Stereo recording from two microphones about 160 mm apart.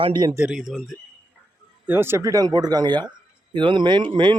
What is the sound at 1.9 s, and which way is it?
Speech, 15° right (ahead or behind).